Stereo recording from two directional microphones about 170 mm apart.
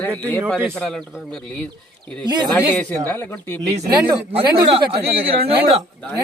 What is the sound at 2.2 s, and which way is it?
Speech, 25° right (ahead or behind).